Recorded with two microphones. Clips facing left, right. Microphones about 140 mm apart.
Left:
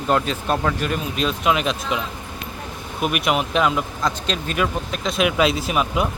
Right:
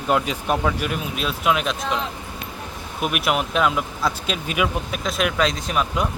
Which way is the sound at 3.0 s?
Centre (ahead or behind).